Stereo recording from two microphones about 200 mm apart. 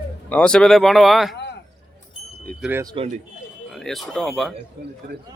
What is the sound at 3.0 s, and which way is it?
Speech, 25° right (ahead or behind).